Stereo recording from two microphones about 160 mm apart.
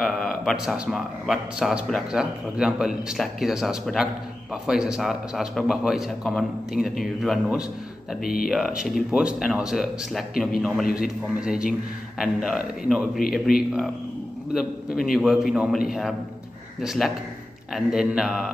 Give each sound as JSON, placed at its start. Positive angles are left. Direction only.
{"t": 0.0, "sound": "a man's voice", "side_deg": 0}
{"t": 8.2, "sound": "speech", "side_deg": 65}
{"t": 8.5, "sound": "a man's voice", "side_deg": 0}